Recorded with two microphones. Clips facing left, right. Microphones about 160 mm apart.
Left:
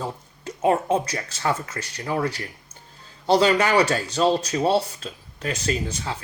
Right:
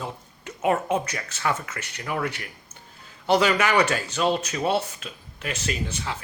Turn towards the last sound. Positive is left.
turn(degrees=35)  # may be behind; listen again after turning